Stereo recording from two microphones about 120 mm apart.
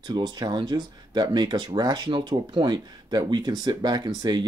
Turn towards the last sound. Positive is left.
turn(degrees=-35)  # may be behind; listen again after turning